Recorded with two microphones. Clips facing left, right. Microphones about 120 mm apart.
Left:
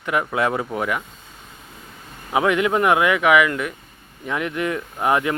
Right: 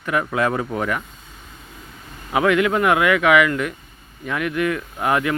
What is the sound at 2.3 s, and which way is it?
Speech, 20° left (ahead or behind).